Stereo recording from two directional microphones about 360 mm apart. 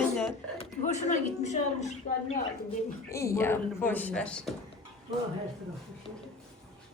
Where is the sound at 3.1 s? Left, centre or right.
Centre.